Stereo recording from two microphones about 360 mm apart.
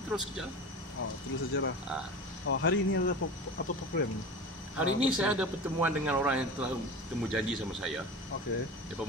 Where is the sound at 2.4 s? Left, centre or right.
Left.